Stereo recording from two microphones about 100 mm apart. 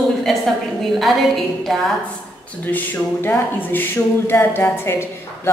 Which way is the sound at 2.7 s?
20° left (ahead or behind).